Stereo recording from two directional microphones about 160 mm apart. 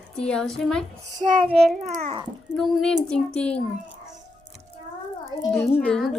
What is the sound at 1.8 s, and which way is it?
Babbling, 50° right (ahead or behind).